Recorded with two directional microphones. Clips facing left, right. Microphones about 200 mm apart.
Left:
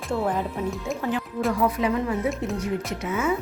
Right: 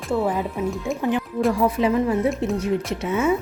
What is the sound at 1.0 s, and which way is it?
Speech, 20° right (ahead or behind).